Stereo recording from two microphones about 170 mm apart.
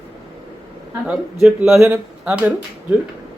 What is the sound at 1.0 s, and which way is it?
Speech, 5° right (ahead or behind).